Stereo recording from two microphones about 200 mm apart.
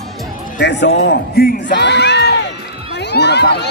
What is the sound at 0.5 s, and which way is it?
Speech, 60° left (ahead or behind).